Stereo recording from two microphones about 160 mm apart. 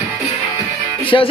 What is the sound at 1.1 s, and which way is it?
Music, 25° left (ahead or behind).